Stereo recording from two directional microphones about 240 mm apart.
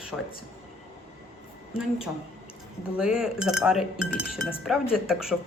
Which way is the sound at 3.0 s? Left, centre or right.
Centre.